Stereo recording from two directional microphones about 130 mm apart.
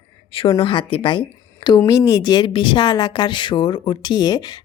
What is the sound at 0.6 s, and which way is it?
Speech, 40° left (ahead or behind).